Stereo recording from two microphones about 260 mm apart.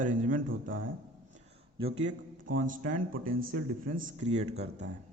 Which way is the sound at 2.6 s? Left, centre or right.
Right.